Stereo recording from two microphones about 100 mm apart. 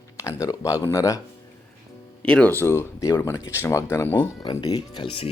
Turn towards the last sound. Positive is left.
turn(degrees=55)  # may be behind; listen again after turning